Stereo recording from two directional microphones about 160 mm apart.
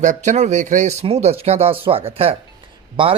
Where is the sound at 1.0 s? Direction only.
40° right (ahead or behind).